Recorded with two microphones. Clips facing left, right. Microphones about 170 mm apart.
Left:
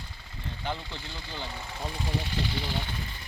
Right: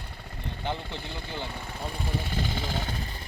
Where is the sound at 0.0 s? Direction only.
60° right (ahead or behind).